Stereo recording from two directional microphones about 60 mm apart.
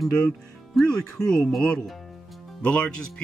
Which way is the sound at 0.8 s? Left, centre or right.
Centre.